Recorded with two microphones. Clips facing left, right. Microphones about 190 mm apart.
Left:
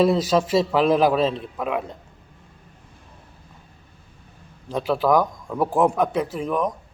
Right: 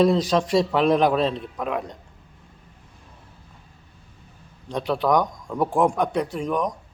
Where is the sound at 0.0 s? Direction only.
5° left (ahead or behind).